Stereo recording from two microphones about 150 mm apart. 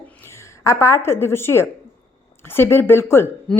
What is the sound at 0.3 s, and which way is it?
A woman's voice, 20° left (ahead or behind).